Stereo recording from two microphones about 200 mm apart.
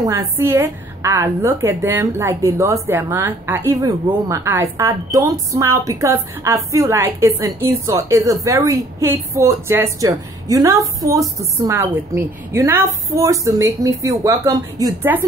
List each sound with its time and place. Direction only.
0.0 s a woman's voice: 15° right (ahead or behind)